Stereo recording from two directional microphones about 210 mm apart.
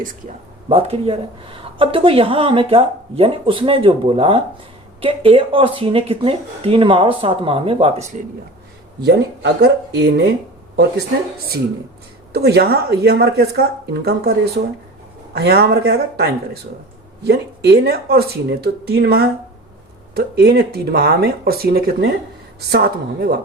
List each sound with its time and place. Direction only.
0.7 s a woman's voice: 30° right (ahead or behind)
9.0 s speech: 50° right (ahead or behind)
12.3 s speech: 50° right (ahead or behind)
15.4 s speech: 50° right (ahead or behind)